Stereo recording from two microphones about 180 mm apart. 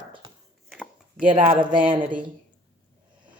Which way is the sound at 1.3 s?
30° right (ahead or behind).